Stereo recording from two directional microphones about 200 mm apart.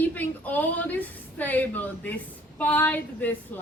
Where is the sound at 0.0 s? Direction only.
10° left (ahead or behind).